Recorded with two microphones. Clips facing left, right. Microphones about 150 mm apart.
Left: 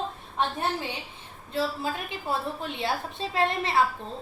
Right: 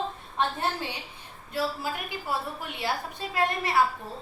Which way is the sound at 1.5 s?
25° left (ahead or behind).